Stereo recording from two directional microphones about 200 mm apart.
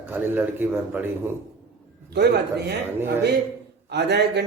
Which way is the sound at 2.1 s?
55° right (ahead or behind).